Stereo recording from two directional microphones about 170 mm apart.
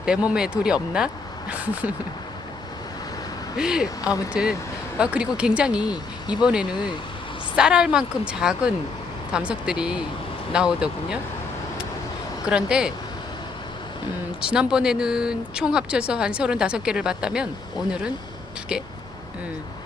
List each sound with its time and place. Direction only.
0.3 s speech: 5° right (ahead or behind)
3.6 s speech: 5° right (ahead or behind)
5.9 s speech: 25° left (ahead or behind)
6.4 s speech: 5° right (ahead or behind)
12.5 s speech: 5° right (ahead or behind)
14.4 s speech: 5° right (ahead or behind)